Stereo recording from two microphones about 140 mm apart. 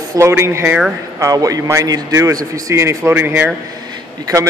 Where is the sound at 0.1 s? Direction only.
20° right (ahead or behind).